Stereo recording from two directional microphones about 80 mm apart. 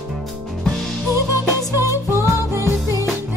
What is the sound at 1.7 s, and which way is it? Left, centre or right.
Music, right.